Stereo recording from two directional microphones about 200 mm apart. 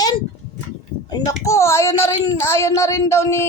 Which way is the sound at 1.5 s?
15° left (ahead or behind).